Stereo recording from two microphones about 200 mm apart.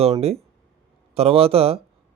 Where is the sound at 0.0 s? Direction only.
30° right (ahead or behind).